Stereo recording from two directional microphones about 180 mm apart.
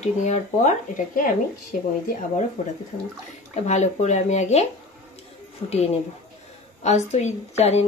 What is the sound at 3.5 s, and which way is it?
Speech, 40° left (ahead or behind).